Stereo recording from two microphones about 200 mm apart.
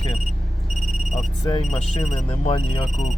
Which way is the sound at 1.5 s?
25° left (ahead or behind).